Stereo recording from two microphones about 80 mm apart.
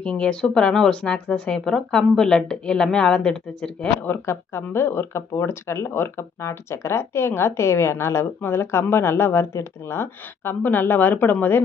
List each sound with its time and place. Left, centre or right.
0.0 s speech: centre
4.3 s speech: left